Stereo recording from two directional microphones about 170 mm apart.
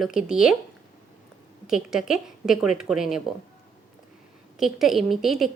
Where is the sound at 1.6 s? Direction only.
5° right (ahead or behind).